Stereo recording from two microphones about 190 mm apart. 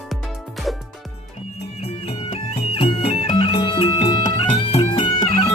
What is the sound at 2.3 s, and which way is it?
Music, 30° left (ahead or behind).